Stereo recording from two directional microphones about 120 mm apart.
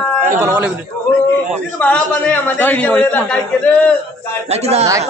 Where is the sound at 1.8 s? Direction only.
15° left (ahead or behind).